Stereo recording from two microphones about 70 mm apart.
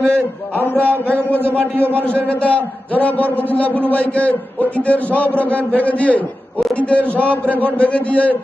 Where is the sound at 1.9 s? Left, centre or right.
Left.